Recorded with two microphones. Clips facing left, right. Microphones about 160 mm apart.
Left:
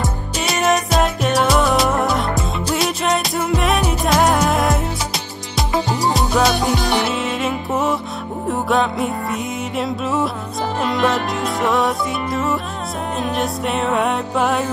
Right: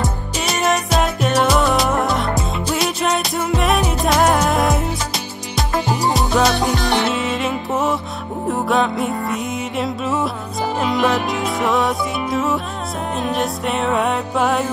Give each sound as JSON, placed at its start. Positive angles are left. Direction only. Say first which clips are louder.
{"t": 0.4, "sound": "music", "louder": "left 1 dB", "side_deg": 0}
{"t": 6.1, "sound": "music", "louder": "even", "side_deg": 0}